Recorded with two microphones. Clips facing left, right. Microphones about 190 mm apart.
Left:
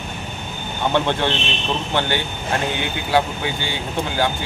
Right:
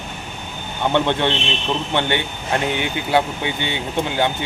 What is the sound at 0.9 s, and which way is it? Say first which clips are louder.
Speech: right 2 dB; 20° right (ahead or behind).